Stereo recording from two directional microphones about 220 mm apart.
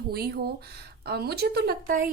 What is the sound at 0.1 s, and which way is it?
Speech, 45° right (ahead or behind).